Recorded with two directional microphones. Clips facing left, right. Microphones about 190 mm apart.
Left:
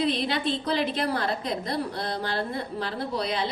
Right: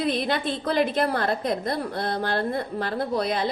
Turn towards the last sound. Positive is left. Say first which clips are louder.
# right 3 dB
turn(degrees=-50)  # may be behind; listen again after turning